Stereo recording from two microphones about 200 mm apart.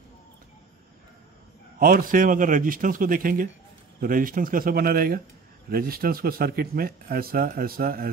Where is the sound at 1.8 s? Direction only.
45° right (ahead or behind).